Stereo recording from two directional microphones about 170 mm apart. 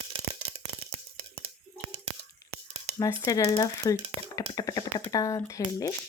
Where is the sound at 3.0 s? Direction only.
20° left (ahead or behind).